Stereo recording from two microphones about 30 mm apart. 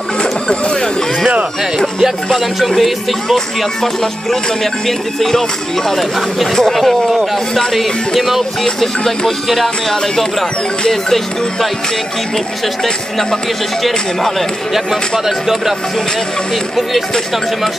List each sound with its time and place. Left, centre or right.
0.2 s music: left
2.3 s music: centre
3.3 s speech: centre
6.6 s music: centre
8.6 s speech: centre
14.7 s speech: centre